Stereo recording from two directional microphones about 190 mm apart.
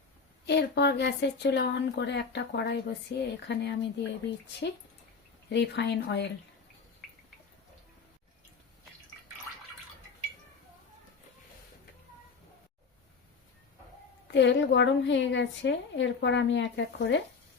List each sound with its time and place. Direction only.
0.4 s speech: 65° left (ahead or behind)
5.5 s speech: 65° left (ahead or behind)
14.3 s a woman's voice: 70° left (ahead or behind)